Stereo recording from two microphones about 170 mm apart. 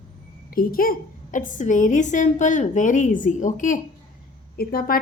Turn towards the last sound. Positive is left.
turn(degrees=60)  # may be behind; listen again after turning